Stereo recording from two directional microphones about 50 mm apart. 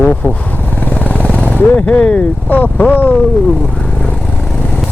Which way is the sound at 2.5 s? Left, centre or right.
Left.